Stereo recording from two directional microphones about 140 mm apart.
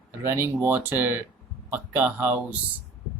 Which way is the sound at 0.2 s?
20° right (ahead or behind).